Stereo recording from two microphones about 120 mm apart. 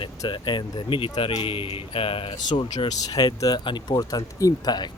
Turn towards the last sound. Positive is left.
turn(degrees=35)  # may be behind; listen again after turning